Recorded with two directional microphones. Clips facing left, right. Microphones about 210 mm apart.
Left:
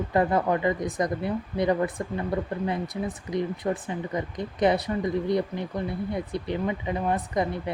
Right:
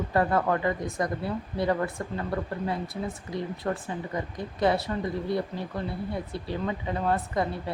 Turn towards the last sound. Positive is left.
turn(degrees=20)  # may be behind; listen again after turning